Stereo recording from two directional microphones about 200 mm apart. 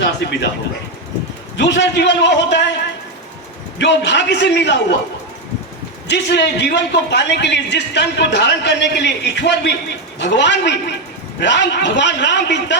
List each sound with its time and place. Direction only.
1.5 s a man's voice: 60° left (ahead or behind)
3.8 s a man's voice: 60° left (ahead or behind)
6.1 s a man's voice: 60° left (ahead or behind)